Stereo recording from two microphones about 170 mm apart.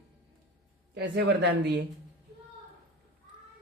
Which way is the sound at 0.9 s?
80° right.